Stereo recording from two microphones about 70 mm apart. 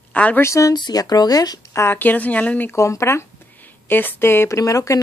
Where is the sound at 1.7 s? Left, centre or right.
Left.